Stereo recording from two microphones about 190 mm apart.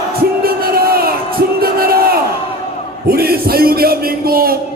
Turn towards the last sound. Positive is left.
turn(degrees=-50)  # may be behind; listen again after turning